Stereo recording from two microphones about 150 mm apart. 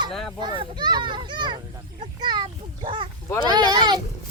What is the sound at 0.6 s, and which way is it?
A child's voice, 30° right (ahead or behind).